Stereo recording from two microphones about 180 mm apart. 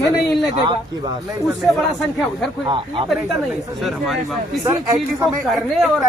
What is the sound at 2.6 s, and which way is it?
Speech, 30° right (ahead or behind).